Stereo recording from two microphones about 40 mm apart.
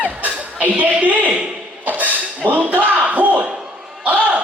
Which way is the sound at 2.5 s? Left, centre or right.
Right.